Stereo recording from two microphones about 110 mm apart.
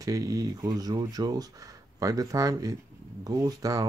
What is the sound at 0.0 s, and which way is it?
Speech, 30° right (ahead or behind).